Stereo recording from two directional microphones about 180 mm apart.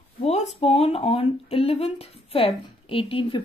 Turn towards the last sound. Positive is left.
turn(degrees=30)  # may be behind; listen again after turning